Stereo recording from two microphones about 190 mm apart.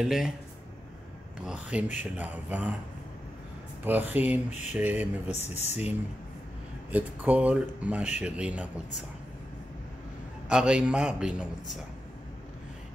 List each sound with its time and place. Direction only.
0.0 s a man's voice: centre (ahead or behind)
1.4 s speech: 5° right (ahead or behind)
3.8 s speech: 10° right (ahead or behind)
5.6 s speech: 35° left (ahead or behind)
6.9 s speech: 10° right (ahead or behind)
10.5 s a man's voice: 5° right (ahead or behind)